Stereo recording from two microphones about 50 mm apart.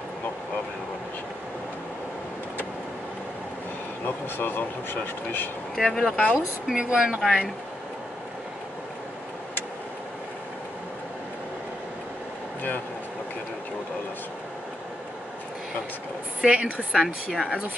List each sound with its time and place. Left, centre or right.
4.4 s speech: left
5.8 s speech: centre
6.3 s speech: centre
7.2 s speech: centre
16.4 s a woman's voice: right
16.9 s speech: centre